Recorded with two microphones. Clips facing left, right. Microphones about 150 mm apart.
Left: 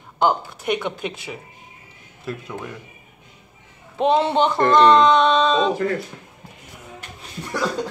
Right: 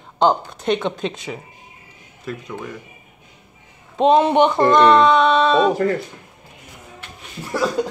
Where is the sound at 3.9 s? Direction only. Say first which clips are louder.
Right 4 dB; 20° right (ahead or behind).